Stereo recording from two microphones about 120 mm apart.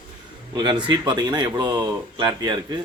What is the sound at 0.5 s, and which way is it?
Speech, 35° right (ahead or behind).